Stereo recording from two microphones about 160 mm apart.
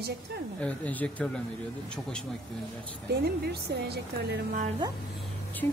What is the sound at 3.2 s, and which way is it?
A woman's voice, 85° right.